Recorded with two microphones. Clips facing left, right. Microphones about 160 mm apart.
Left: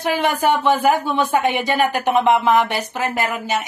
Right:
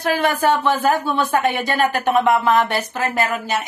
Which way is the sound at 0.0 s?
20° left (ahead or behind).